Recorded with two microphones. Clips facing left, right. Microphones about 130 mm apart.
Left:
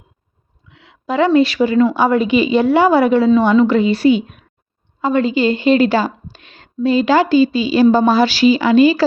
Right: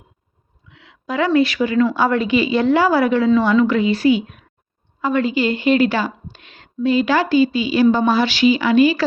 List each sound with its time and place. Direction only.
1.0 s a woman's voice: 25° left (ahead or behind)